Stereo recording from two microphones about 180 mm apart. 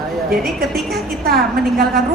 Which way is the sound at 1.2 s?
55° right (ahead or behind).